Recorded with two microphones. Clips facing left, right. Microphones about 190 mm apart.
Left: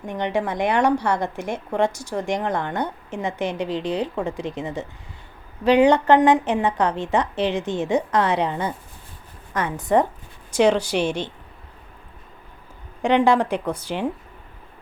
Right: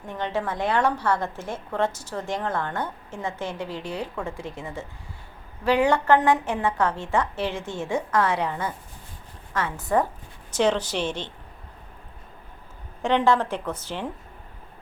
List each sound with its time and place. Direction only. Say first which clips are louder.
0.0 s a woman's voice: left 4 dB; 15° left (ahead or behind)
13.0 s a woman's voice: left 4 dB; 15° left (ahead or behind)